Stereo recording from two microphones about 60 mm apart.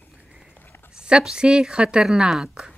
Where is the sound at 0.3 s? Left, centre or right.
Centre.